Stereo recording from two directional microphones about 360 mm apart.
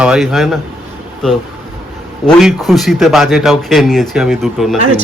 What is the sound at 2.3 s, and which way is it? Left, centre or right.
Speech, centre.